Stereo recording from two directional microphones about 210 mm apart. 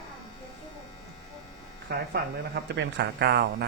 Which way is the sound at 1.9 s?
50° right (ahead or behind).